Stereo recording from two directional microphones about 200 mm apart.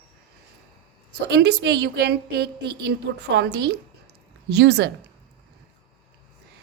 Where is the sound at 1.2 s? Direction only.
60° right (ahead or behind).